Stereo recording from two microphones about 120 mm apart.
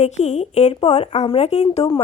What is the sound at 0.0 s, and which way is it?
Speech, 70° left (ahead or behind).